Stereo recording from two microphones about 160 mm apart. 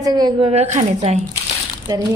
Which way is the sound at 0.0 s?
25° right (ahead or behind).